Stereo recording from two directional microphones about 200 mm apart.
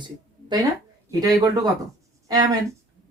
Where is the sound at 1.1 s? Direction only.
20° right (ahead or behind).